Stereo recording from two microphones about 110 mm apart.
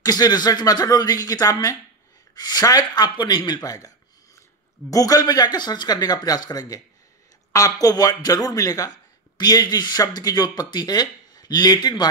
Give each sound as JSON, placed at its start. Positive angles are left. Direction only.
{"t": 0.0, "sound": "speech", "side_deg": 35}
{"t": 4.9, "sound": "speech", "side_deg": 35}